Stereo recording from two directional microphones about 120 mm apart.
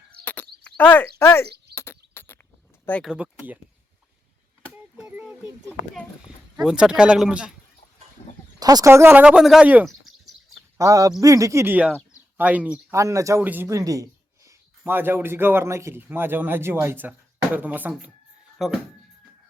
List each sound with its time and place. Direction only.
0.3 s a sound: 15° left (ahead or behind)
3.0 s speech: 10° right (ahead or behind)
4.9 s a sound: 5° right (ahead or behind)
6.2 s speech: 5° right (ahead or behind)
8.2 s a sound: 65° left (ahead or behind)
8.5 s speech: 30° right (ahead or behind)
9.2 s speech: 5° right (ahead or behind)
9.8 s bird: centre (ahead or behind)
10.8 s speech: 30° right (ahead or behind)
11.6 s speech: 15° right (ahead or behind)
12.9 s speech: 25° right (ahead or behind)
13.4 s speech: 15° right (ahead or behind)
13.7 s speech: 30° right (ahead or behind)
18.6 s speech: 5° right (ahead or behind)